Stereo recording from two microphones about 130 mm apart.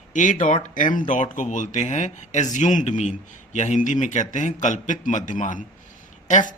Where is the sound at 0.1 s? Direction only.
75° left (ahead or behind).